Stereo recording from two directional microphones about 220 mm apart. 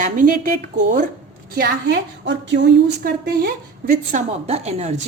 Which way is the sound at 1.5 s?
50° right (ahead or behind).